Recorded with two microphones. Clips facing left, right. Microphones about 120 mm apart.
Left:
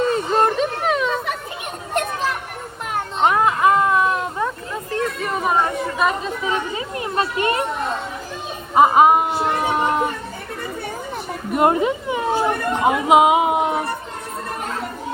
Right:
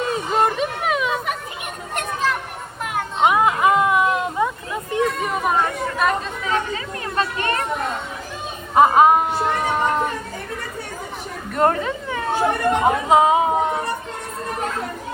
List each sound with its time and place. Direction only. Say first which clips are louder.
0.0 s a sound: left 2 dB; centre (ahead or behind)
3.2 s a sound: even; 15° right (ahead or behind)
5.2 s chatter: left 1 dB; centre (ahead or behind)
6.4 s chatter: even; 20° left (ahead or behind)
8.7 s speech: even; 5° left (ahead or behind)
11.5 s speech: left 2 dB; 15° left (ahead or behind)